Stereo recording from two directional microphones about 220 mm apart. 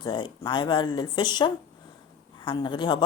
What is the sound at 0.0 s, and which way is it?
Speech, 20° left (ahead or behind).